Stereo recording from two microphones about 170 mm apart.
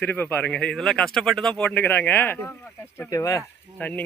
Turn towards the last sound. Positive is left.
turn(degrees=10)  # may be behind; listen again after turning